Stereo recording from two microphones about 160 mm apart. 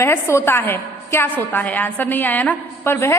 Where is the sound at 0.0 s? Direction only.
15° left (ahead or behind).